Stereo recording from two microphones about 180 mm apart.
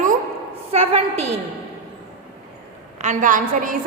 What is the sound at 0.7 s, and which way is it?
Speech, 35° right (ahead or behind).